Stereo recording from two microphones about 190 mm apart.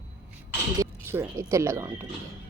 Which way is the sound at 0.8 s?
15° right (ahead or behind).